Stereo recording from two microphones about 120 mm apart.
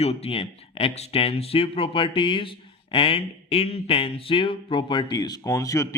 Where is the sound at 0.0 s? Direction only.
60° left (ahead or behind).